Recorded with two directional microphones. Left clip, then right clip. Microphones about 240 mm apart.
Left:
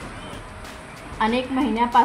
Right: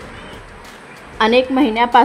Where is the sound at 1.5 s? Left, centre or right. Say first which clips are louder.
Right 6 dB; right.